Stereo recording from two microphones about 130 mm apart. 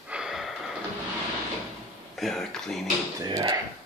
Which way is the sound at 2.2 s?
Centre (ahead or behind).